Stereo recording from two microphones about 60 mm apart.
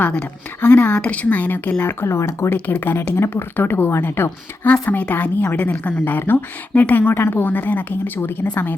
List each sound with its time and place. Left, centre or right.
0.6 s a woman's voice: left
1.5 s a woman's voice: left
2.0 s speech: left
2.6 s a woman's voice: left
3.2 s a woman's voice: left
4.6 s a woman's voice: left